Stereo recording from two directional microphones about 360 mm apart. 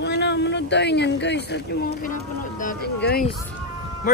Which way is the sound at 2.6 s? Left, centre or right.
Left.